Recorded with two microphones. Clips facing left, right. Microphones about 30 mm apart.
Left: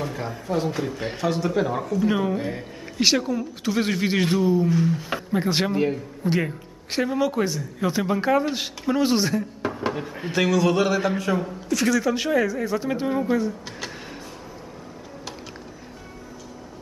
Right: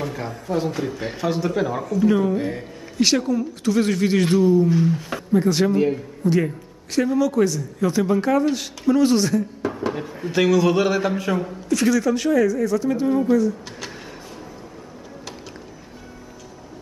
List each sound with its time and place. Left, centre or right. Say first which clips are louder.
0.0 s a man's voice: right 1 dB; centre
2.0 s speech: right 5 dB; centre
2.3 s a man's voice: right 3 dB; centre
3.0 s speech: right 2 dB; centre
4.6 s a man's voice: right 2 dB; centre
5.3 s speech: right 5 dB; left
5.7 s speech: right 4 dB; centre
6.2 s a man's voice: right 4 dB; left
10.3 s a man's voice: right 3 dB; centre
12.1 s speech: right 3 dB; left
13.7 s a sound: even; centre